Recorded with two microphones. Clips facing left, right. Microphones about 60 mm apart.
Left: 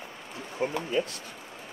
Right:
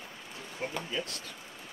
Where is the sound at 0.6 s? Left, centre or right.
Centre.